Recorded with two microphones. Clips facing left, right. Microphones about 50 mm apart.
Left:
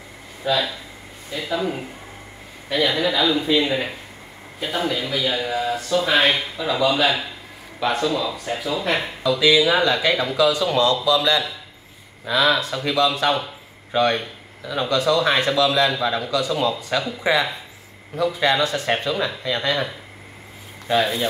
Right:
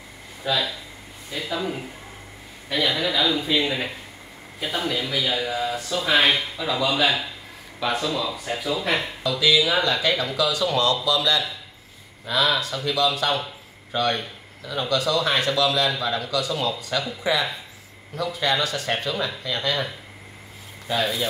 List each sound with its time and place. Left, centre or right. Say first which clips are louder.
0.4 s speech: left 3 dB; centre
9.6 s speech: left 4 dB; centre
12.3 s speech: left 3 dB; left
15.2 s speech: left 3 dB; left